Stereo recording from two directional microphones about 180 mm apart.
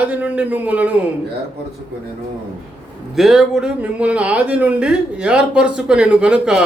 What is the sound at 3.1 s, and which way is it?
Speech, centre (ahead or behind).